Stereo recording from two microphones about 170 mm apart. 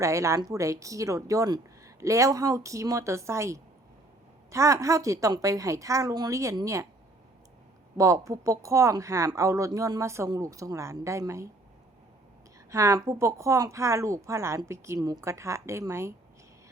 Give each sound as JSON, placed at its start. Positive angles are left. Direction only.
{"t": 0.0, "sound": "a woman's voice", "side_deg": -15}
{"t": 7.9, "sound": "a woman's voice", "side_deg": -20}
{"t": 12.7, "sound": "speech", "side_deg": -15}